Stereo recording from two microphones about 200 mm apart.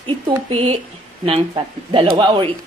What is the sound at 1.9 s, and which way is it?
Speech, 25° right (ahead or behind).